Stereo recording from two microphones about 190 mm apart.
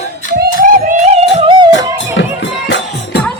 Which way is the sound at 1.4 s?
25° right (ahead or behind).